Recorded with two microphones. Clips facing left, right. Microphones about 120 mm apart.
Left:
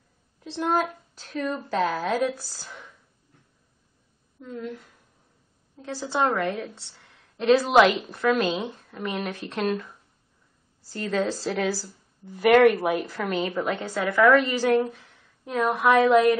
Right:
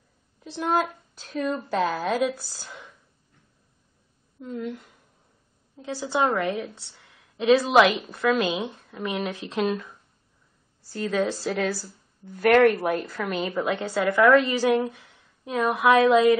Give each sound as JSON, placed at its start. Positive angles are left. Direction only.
{"t": 0.4, "sound": "a woman's voice", "side_deg": 0}
{"t": 4.5, "sound": "a woman's voice", "side_deg": -15}
{"t": 5.9, "sound": "a woman's voice", "side_deg": -5}
{"t": 10.9, "sound": "a woman's voice", "side_deg": -5}